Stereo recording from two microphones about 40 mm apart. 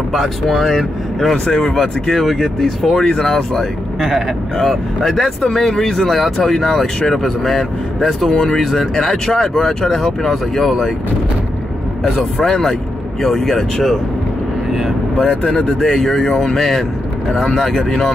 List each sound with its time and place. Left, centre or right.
0.1 s speech: centre
3.0 s speech: centre
12.0 s speech: centre
15.2 s speech: centre